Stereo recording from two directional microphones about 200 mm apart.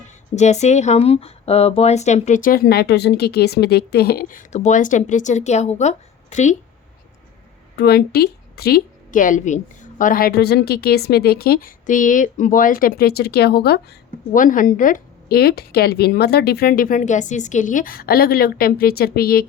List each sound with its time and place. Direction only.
0.3 s speech: 35° left (ahead or behind)
7.8 s a woman's voice: 50° left (ahead or behind)